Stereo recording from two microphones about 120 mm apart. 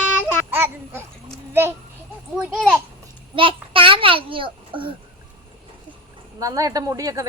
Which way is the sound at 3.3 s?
45° right (ahead or behind).